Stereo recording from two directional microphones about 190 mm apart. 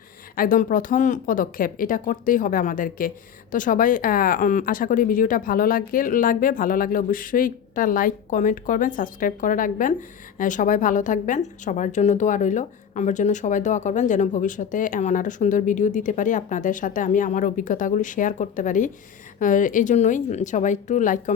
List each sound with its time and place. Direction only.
0.3 s a woman's voice: 45° left (ahead or behind)